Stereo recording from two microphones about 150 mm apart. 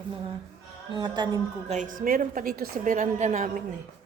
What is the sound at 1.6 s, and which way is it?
A woman's voice, 55° right (ahead or behind).